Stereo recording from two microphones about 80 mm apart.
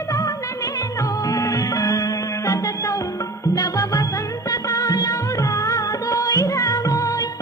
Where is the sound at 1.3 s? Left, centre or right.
Left.